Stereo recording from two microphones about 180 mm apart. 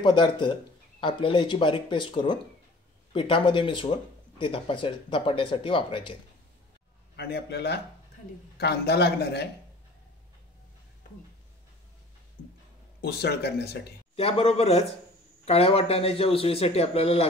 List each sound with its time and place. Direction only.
0.0 s speech: 25° left (ahead or behind)
7.2 s a man's voice: 65° left (ahead or behind)
13.0 s a man's voice: 65° left (ahead or behind)
14.1 s a man's voice: 35° left (ahead or behind)